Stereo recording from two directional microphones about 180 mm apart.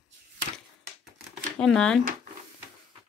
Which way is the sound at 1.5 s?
5° left (ahead or behind).